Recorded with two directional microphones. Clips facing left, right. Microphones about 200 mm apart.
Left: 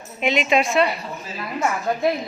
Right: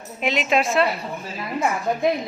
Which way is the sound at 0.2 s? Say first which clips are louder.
Left 2 dB; centre (ahead or behind).